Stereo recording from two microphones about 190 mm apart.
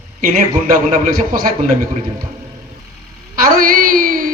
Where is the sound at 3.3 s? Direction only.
50° right (ahead or behind).